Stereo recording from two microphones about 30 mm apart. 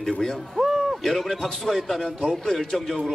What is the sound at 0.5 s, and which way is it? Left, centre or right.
Owl, centre.